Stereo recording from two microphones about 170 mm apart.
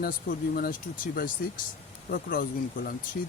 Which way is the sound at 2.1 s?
55° left (ahead or behind).